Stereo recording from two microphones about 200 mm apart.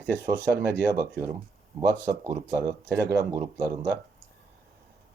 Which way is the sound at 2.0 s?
15° right (ahead or behind).